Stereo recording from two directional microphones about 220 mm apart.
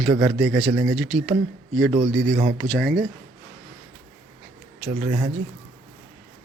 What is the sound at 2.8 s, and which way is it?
Speech, centre (ahead or behind).